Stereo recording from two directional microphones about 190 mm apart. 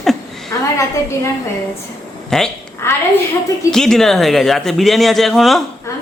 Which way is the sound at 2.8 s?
15° left (ahead or behind).